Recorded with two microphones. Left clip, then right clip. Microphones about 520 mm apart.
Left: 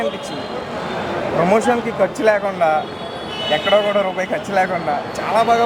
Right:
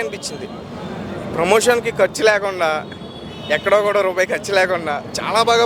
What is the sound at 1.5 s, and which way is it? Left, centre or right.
A man's voice, right.